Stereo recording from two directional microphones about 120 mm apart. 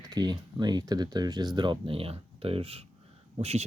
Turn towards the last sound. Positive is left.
turn(degrees=-60)  # may be behind; listen again after turning